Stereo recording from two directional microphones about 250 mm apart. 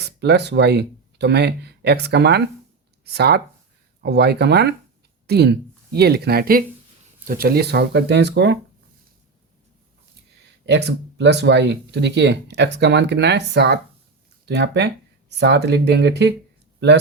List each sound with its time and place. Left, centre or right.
0.0 s a woman's voice: right
10.7 s speech: right